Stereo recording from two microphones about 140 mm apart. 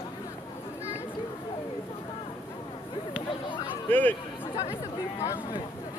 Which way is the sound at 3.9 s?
10° left (ahead or behind).